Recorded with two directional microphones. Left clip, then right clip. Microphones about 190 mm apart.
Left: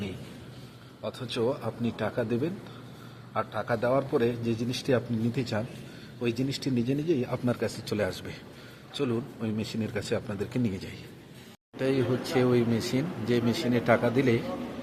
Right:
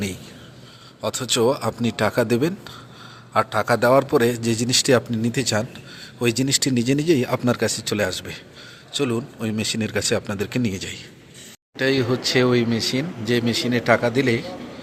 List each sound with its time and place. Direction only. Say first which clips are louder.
1.0 s a man's voice: right 10 dB; 20° right (ahead or behind); by 14.5 s 5° right (ahead or behind)